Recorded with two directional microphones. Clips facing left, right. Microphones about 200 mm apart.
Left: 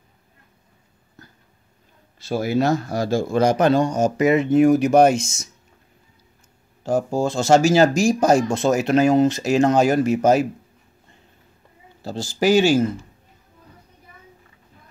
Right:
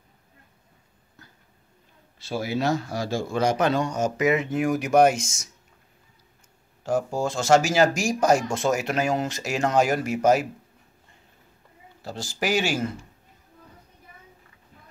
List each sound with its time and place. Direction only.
2.2 s a man's voice: 45° left (ahead or behind); by 5.3 s 30° left (ahead or behind)
6.8 s speech: 30° left (ahead or behind)
12.0 s speech: 30° left (ahead or behind)